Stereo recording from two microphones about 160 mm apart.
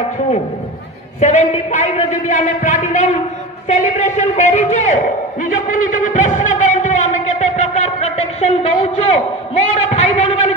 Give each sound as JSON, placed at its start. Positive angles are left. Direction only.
{"t": 1.2, "sound": "a man's voice", "side_deg": 45}